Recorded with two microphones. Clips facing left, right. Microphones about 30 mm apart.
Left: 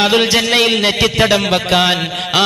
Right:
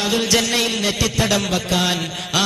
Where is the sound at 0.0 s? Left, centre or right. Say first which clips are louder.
Left 8 dB; left.